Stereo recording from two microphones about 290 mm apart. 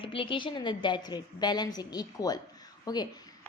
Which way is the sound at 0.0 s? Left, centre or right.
Centre.